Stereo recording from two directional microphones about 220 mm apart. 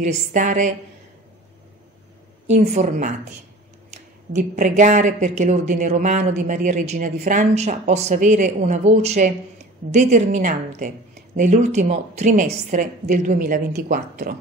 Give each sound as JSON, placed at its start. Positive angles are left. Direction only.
{"t": 0.0, "sound": "speech", "side_deg": -35}
{"t": 2.5, "sound": "speech", "side_deg": -35}